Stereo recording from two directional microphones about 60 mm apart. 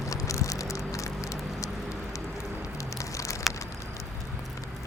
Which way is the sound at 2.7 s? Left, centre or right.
Left.